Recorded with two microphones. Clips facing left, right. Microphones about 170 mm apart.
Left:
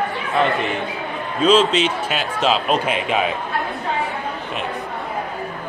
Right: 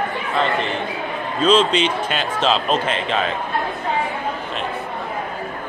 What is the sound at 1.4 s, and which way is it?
Speech, 5° left (ahead or behind).